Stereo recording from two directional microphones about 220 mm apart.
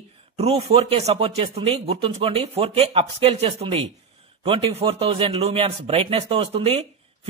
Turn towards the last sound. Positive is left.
turn(degrees=-30)  # may be behind; listen again after turning